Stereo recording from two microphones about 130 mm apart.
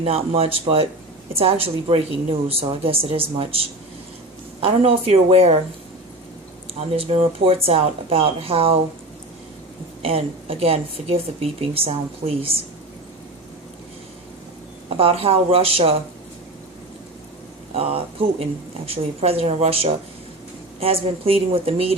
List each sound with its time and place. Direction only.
0.0 s speech: 50° right (ahead or behind)
6.7 s speech: 45° right (ahead or behind)
10.0 s speech: 50° right (ahead or behind)
14.8 s speech: 45° right (ahead or behind)
17.7 s speech: 50° right (ahead or behind)